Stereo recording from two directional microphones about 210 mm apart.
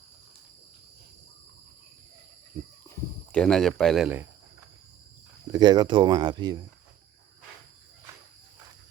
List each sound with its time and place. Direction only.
2.5 s a sound: 20° right (ahead or behind)
3.3 s speech: 5° left (ahead or behind)
5.5 s speech: 20° right (ahead or behind)